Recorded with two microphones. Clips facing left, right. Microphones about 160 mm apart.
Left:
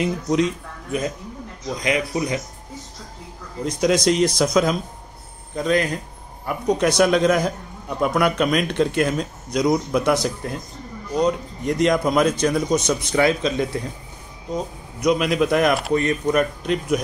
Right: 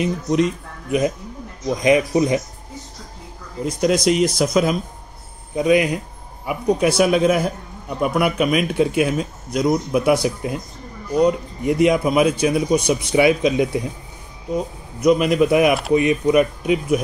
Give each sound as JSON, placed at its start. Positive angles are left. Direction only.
{"t": 0.0, "sound": "speech", "side_deg": 0}
{"t": 1.8, "sound": "speech", "side_deg": -25}
{"t": 3.6, "sound": "speech", "side_deg": 0}